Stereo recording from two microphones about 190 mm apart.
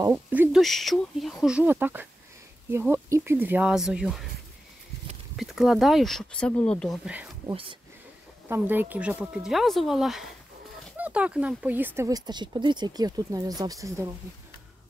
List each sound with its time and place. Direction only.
0.1 s speech: 5° right (ahead or behind)
5.3 s speech: centre (ahead or behind)
7.1 s speech: 10° right (ahead or behind)